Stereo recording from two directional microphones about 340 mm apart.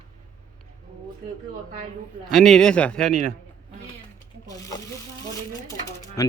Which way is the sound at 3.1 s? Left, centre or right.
Right.